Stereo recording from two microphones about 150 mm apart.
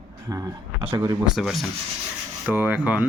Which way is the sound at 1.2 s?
5° right (ahead or behind).